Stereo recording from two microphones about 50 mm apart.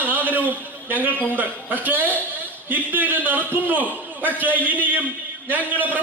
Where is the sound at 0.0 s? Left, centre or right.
Right.